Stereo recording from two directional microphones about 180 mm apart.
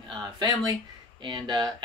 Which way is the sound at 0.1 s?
25° right (ahead or behind).